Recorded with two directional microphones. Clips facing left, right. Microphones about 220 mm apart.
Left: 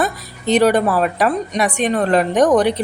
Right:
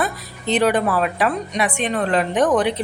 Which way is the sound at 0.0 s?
40° left (ahead or behind).